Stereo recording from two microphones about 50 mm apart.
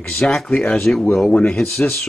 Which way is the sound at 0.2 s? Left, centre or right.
Centre.